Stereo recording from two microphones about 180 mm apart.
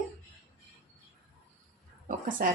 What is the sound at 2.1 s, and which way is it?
Speech, 50° right (ahead or behind).